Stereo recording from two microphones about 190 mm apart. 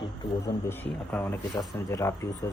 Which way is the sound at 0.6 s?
10° left (ahead or behind).